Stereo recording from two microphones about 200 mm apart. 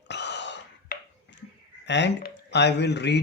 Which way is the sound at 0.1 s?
60° left (ahead or behind).